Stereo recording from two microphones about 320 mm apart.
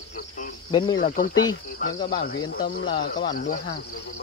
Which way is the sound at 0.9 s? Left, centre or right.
Left.